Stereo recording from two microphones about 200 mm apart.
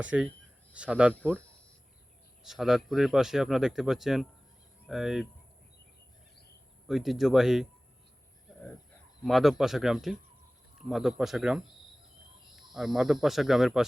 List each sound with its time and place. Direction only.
0.0 s speech: 5° right (ahead or behind)
2.4 s speech: centre (ahead or behind)
6.8 s speech: centre (ahead or behind)
8.5 s chicken: centre (ahead or behind)
9.2 s speech: centre (ahead or behind)
12.7 s speech: centre (ahead or behind)